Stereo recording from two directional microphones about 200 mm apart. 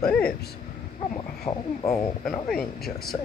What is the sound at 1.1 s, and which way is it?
Speech, 30° left (ahead or behind).